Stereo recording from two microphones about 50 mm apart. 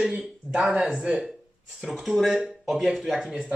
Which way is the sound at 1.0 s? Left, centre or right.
Centre.